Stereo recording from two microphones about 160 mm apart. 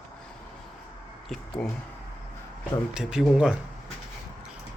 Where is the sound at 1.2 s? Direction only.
Centre (ahead or behind).